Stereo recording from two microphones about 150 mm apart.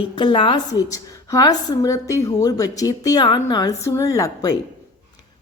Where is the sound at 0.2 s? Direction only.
30° left (ahead or behind).